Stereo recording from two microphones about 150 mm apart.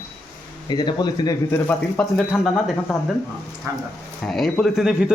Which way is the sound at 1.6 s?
10° left (ahead or behind).